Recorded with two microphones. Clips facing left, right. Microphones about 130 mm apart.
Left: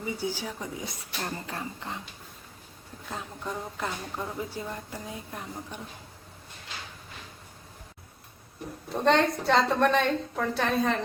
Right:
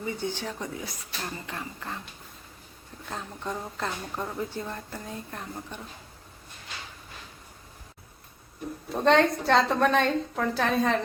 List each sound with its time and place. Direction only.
0.0 s a woman's voice: 10° left (ahead or behind)
1.2 s speech: 35° left (ahead or behind)
3.1 s a woman's voice: 5° left (ahead or behind)
8.9 s a woman's voice: centre (ahead or behind)